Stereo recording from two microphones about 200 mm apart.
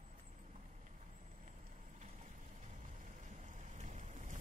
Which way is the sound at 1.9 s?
35° right (ahead or behind).